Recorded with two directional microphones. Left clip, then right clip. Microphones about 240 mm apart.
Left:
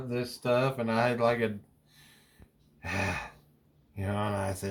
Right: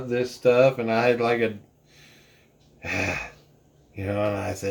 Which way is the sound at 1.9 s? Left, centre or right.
Left.